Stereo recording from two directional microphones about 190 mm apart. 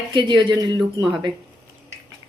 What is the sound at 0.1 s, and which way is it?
Speech, 25° right (ahead or behind).